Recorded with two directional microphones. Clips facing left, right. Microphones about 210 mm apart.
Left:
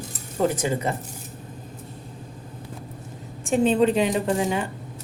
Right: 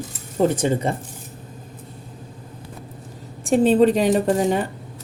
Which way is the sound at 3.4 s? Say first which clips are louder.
Right 4 dB; 35° right (ahead or behind).